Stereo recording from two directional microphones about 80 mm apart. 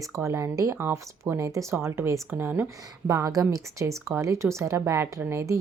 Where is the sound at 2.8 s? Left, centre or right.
Right.